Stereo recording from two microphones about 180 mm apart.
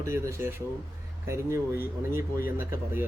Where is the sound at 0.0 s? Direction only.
15° right (ahead or behind).